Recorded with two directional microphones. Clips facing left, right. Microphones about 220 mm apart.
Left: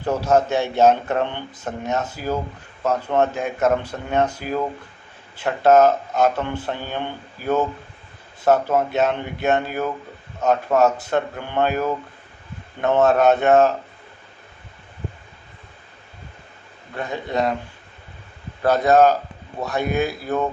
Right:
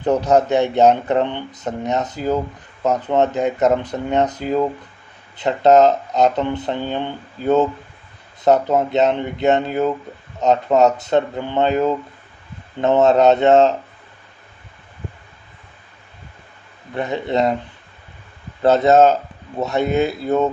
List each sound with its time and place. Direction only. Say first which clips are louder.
0.0 s speech: right 3 dB; 20° right (ahead or behind)
16.9 s speech: right 5 dB; 20° right (ahead or behind)
18.6 s speech: right 3 dB; 25° right (ahead or behind)